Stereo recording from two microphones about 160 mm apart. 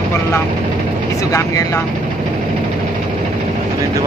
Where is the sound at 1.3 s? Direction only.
20° left (ahead or behind).